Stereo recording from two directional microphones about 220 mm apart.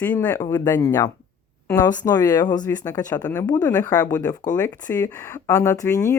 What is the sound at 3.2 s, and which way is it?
Speech, 5° left (ahead or behind).